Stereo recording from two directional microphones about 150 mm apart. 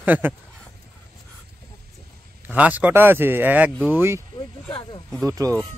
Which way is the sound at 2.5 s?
10° right (ahead or behind).